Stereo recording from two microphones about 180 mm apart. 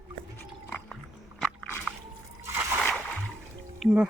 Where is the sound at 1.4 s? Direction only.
5° left (ahead or behind).